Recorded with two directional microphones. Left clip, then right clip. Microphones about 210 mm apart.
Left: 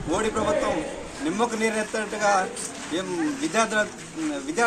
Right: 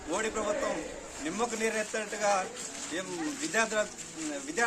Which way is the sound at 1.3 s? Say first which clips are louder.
Left 6 dB; 10° right (ahead or behind).